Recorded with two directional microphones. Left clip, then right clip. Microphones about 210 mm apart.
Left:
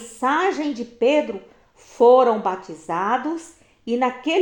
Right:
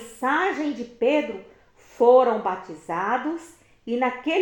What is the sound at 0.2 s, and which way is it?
Speech, 35° left (ahead or behind).